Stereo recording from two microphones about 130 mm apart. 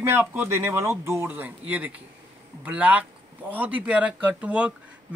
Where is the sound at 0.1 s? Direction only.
20° right (ahead or behind).